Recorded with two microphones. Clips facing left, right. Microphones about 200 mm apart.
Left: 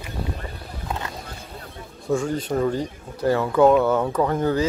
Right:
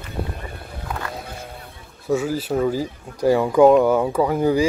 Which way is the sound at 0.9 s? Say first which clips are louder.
Right 1 dB; 20° left (ahead or behind).